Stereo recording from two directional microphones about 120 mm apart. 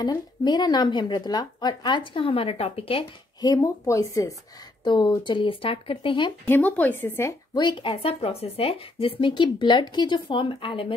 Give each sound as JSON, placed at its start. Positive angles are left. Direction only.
{"t": 0.0, "sound": "speech", "side_deg": 35}
{"t": 3.3, "sound": "speech", "side_deg": 30}
{"t": 4.8, "sound": "speech", "side_deg": 40}
{"t": 6.4, "sound": "speech", "side_deg": 15}
{"t": 7.5, "sound": "speech", "side_deg": 40}